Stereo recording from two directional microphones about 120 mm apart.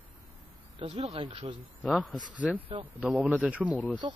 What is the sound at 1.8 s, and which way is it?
Speech, centre (ahead or behind).